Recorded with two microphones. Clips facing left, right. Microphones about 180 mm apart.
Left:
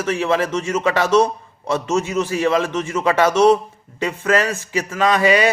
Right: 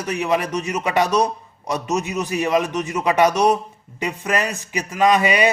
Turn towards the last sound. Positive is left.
turn(degrees=-20)  # may be behind; listen again after turning